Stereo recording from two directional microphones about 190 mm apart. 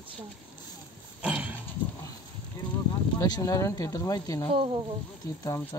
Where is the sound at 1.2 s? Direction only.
10° right (ahead or behind).